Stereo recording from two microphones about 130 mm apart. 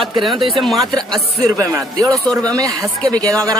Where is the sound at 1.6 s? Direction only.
25° right (ahead or behind).